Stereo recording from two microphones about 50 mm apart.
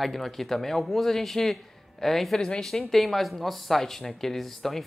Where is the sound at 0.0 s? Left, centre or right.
Centre.